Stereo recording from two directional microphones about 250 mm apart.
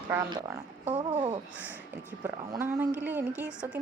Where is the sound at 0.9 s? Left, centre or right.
Right.